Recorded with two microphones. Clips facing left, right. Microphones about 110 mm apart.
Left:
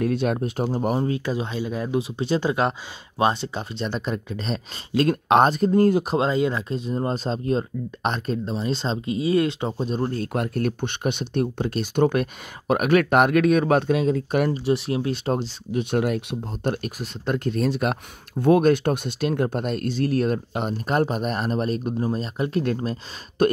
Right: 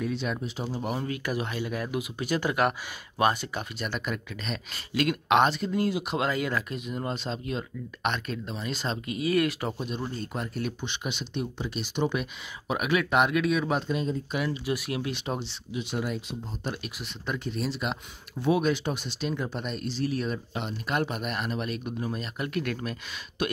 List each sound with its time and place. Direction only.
0.0 s speech: 55° left (ahead or behind)
0.7 s speech: 40° left (ahead or behind)
1.0 s speech: 25° left (ahead or behind); by 6.1 s 45° left (ahead or behind)
6.1 s speech: 25° left (ahead or behind)
10.0 s speech: 60° left (ahead or behind); by 14.2 s 90° left
14.3 s speech: 55° left (ahead or behind)
14.6 s speech: 30° left (ahead or behind)
15.7 s speech: 55° left (ahead or behind); by 22.9 s 30° left (ahead or behind)
23.4 s speech: 45° left (ahead or behind)